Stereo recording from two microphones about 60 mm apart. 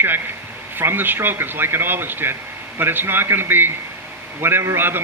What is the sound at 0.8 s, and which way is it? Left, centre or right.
Speech, right.